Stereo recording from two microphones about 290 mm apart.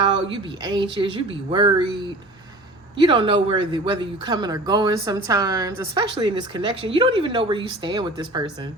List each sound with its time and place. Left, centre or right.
0.0 s speech: centre
3.0 s speech: centre